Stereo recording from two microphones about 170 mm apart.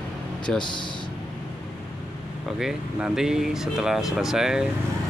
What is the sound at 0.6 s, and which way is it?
Speech, 25° left (ahead or behind).